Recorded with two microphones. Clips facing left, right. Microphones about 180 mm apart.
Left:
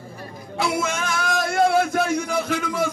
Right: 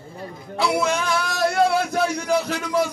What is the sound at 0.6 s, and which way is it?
Music, 50° left (ahead or behind).